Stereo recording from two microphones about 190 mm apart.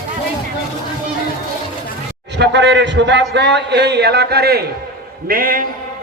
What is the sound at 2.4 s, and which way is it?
A man's voice, 65° right (ahead or behind).